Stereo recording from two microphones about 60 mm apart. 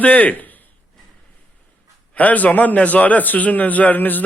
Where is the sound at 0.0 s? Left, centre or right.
Left.